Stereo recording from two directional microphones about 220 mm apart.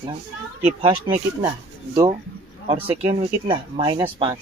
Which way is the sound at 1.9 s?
20° right (ahead or behind).